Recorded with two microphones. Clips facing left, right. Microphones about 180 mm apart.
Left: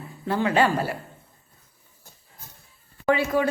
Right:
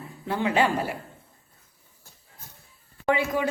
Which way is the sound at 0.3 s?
15° right (ahead or behind).